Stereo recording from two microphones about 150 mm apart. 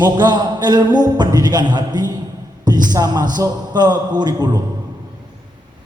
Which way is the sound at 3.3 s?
25° right (ahead or behind).